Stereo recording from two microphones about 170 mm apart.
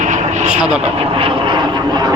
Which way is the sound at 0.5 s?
5° right (ahead or behind).